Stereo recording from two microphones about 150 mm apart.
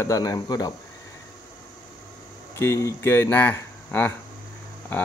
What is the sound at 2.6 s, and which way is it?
Speech, 20° left (ahead or behind).